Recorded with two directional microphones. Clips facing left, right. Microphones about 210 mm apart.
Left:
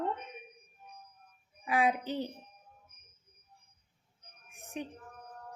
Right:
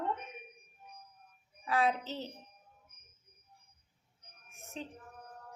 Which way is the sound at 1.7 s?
15° left (ahead or behind).